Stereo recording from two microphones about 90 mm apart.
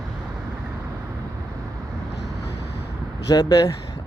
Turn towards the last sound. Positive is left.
turn(degrees=45)  # may be behind; listen again after turning